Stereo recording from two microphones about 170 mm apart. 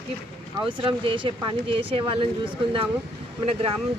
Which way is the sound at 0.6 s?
30° right (ahead or behind).